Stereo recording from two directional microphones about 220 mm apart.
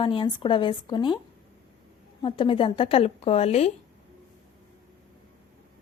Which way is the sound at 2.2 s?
20° left (ahead or behind).